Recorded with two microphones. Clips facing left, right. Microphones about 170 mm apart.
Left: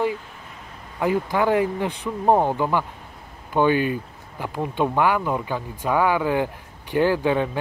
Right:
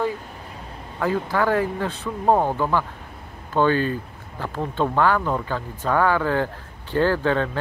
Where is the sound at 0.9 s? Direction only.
15° left (ahead or behind).